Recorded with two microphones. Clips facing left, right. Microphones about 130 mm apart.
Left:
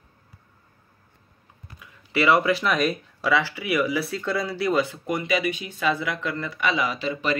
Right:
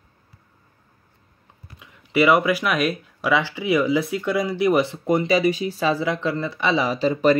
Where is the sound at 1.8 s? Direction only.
15° right (ahead or behind).